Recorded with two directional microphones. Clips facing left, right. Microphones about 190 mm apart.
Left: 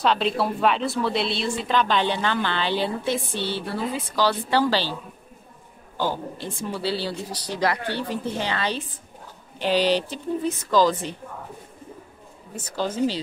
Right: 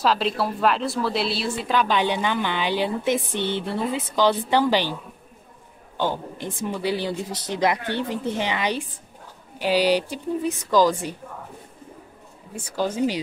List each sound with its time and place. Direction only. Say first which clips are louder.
0.0 s a woman's voice: even; centre (ahead or behind); by 4.9 s 15° right (ahead or behind)
5.9 s a woman's voice: right 1 dB; 20° right (ahead or behind)
12.5 s a woman's voice: right 1 dB; 10° right (ahead or behind)